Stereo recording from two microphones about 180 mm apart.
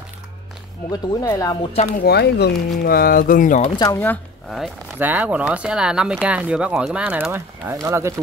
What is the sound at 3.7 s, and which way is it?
Speech, 20° left (ahead or behind).